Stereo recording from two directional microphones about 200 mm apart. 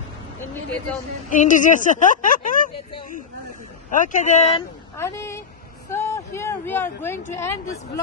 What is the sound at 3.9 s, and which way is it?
Speech, 40° left (ahead or behind).